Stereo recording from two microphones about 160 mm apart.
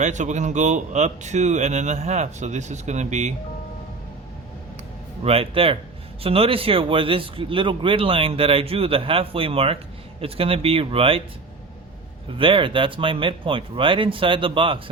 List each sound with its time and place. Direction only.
0.0 s speech: 45° right (ahead or behind)
5.2 s speech: 35° right (ahead or behind)
12.4 s speech: 30° right (ahead or behind)